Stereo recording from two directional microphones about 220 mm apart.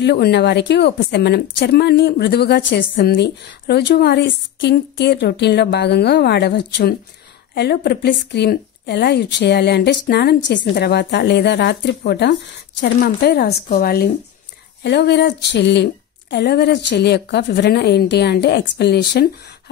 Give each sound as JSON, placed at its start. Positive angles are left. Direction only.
{"t": 0.0, "sound": "speech", "side_deg": 50}